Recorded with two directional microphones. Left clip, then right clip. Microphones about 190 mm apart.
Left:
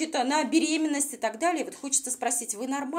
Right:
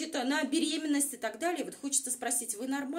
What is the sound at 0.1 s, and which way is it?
A woman's voice, 20° left (ahead or behind).